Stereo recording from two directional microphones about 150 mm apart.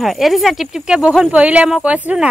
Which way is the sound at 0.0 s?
Centre (ahead or behind).